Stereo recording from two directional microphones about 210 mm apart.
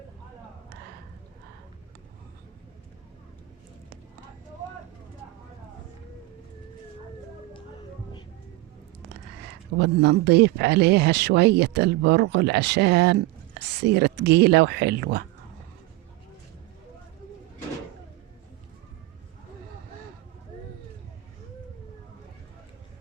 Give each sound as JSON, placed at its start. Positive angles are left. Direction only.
{"t": 9.7, "sound": "speech", "side_deg": -55}